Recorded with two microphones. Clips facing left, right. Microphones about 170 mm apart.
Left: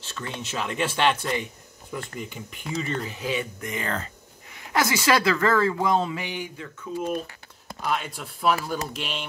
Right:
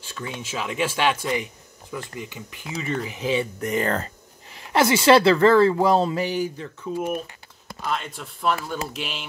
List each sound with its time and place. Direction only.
0.0 s speech: 10° right (ahead or behind)
3.1 s speech: 20° right (ahead or behind)
3.6 s a woman's voice: 40° right (ahead or behind)
4.5 s a woman's voice: 30° right (ahead or behind)
7.8 s speech: 5° left (ahead or behind)